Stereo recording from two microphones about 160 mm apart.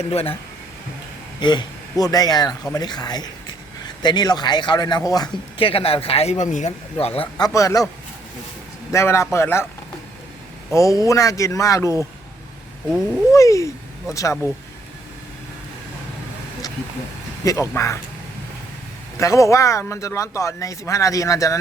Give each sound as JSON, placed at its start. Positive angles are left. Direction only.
{"t": 0.1, "sound": "speech", "side_deg": 40}
{"t": 1.4, "sound": "speech", "side_deg": 30}
{"t": 6.9, "sound": "speech", "side_deg": 35}
{"t": 7.3, "sound": "speech", "side_deg": 20}
{"t": 8.9, "sound": "a man's voice", "side_deg": 20}
{"t": 10.8, "sound": "speech", "side_deg": 20}
{"t": 13.3, "sound": "speech", "side_deg": 20}
{"t": 17.4, "sound": "speech", "side_deg": 20}
{"t": 19.2, "sound": "speech", "side_deg": 20}